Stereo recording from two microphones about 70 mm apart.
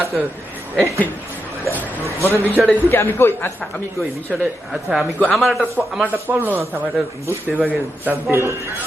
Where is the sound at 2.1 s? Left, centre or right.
Left.